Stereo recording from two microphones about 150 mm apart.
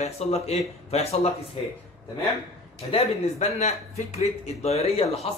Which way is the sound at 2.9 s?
45° left (ahead or behind).